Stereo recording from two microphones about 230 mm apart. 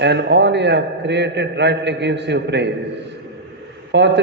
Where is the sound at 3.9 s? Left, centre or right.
Right.